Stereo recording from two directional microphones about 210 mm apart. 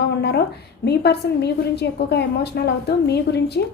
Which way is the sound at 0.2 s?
50° left (ahead or behind).